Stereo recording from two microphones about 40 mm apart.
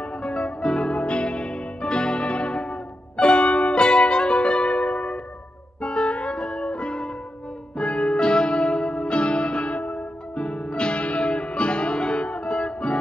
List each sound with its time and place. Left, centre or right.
0.2 s music: left